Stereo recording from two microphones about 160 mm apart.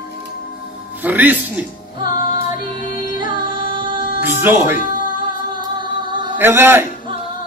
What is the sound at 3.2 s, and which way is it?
Music, 30° right (ahead or behind).